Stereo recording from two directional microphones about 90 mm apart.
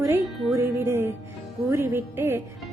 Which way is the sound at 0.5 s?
30° right (ahead or behind).